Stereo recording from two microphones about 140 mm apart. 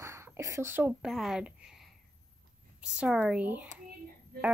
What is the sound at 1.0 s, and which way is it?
A child's voice, centre (ahead or behind).